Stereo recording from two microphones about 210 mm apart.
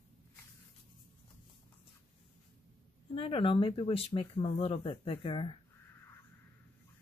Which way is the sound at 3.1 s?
25° left (ahead or behind).